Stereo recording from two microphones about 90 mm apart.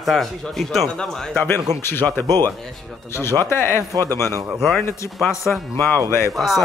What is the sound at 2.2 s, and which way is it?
Speech, 45° right (ahead or behind).